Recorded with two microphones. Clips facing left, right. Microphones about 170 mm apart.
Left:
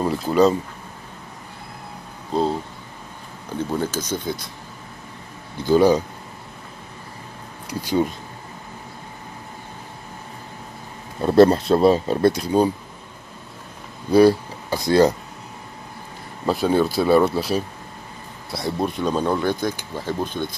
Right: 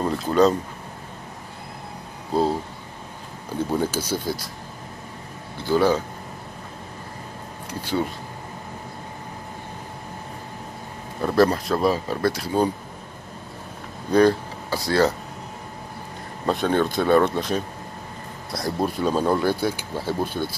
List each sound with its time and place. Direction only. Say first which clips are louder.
0.0 s a sound: left 1 dB; 5° left (ahead or behind)
2.3 s speech: even; 5° right (ahead or behind)
3.7 s speech: right 1 dB; 10° right (ahead or behind)
5.6 s speech: left 4 dB; 15° left (ahead or behind)
7.8 s speech: left 4 dB; 15° left (ahead or behind)
11.1 s speech: left 5 dB; 25° left (ahead or behind)
14.1 s speech: left 3 dB; 10° left (ahead or behind)
16.4 s speech: left 2 dB; 5° left (ahead or behind); by 20.4 s 10° right (ahead or behind)